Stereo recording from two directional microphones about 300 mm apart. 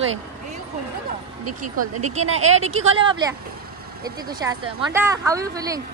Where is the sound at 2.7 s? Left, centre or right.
Right.